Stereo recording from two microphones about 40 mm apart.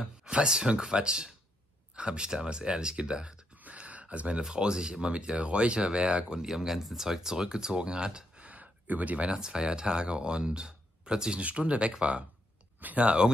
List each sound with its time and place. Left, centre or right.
0.2 s speech: centre
3.6 s a sound: right
4.4 s speech: right
6.4 s speech: centre
8.4 s a sound: right
9.3 s speech: right